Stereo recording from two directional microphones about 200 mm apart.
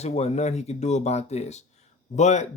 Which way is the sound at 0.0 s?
30° left (ahead or behind).